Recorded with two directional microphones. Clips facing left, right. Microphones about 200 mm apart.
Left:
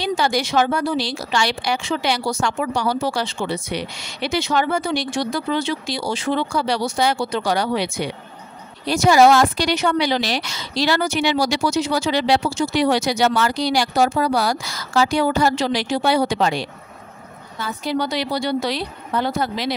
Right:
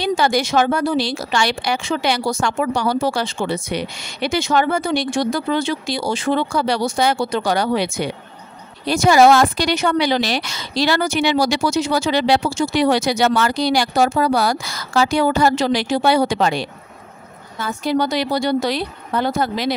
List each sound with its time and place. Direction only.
0.0 s speech: 50° right (ahead or behind)